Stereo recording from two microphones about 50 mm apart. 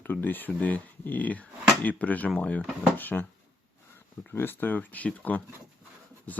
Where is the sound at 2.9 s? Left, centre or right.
Left.